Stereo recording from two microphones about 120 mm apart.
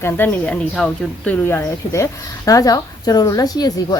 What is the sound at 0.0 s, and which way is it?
A woman's voice, 15° left (ahead or behind).